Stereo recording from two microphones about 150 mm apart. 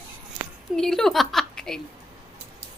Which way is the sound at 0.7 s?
5° left (ahead or behind).